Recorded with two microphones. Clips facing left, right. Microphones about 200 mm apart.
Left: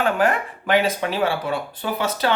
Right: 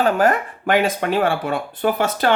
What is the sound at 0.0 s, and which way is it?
Speech, 40° right (ahead or behind).